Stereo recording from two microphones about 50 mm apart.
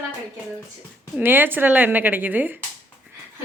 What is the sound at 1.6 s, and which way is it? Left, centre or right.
Speech, right.